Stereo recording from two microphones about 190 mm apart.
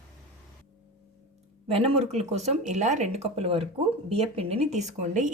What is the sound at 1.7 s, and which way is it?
Speech, 30° right (ahead or behind).